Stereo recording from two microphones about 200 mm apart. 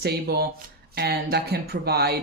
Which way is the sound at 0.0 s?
55° right (ahead or behind).